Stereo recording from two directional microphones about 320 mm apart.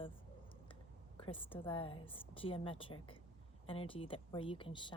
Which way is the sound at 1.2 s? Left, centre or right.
Centre.